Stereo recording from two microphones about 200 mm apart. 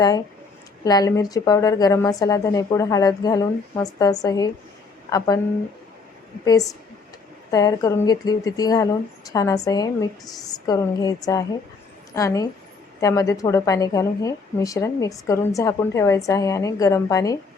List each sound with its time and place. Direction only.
0.9 s a woman's voice: 20° left (ahead or behind)
6.4 s a woman's voice: 20° left (ahead or behind)